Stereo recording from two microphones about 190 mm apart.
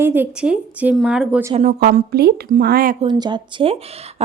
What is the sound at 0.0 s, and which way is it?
Speech, 10° right (ahead or behind).